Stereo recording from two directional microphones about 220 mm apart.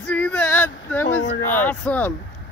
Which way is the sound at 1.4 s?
10° left (ahead or behind).